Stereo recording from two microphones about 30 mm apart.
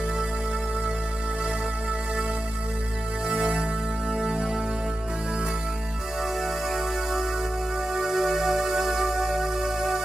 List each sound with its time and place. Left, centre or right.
3.3 s music: right
6.4 s music: centre